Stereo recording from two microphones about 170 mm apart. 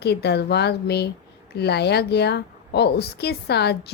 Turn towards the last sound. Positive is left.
turn(degrees=75)  # may be behind; listen again after turning